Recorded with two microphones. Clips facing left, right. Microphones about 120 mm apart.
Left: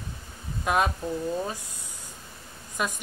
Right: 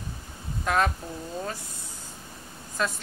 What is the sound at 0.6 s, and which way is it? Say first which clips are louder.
Speech: even; 15° left (ahead or behind).